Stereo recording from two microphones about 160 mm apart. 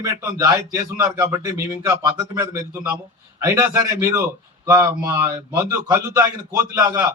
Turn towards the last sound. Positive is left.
turn(degrees=-20)  # may be behind; listen again after turning